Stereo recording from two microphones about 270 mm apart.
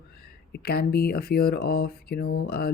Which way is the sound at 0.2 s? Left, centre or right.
Left.